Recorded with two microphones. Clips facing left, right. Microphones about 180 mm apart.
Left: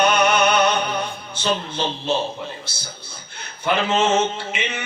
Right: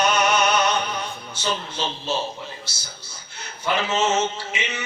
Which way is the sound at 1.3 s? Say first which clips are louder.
Left 4 dB; 55° left (ahead or behind).